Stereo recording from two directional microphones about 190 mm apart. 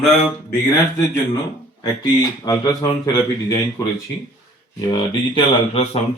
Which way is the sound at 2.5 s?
20° left (ahead or behind).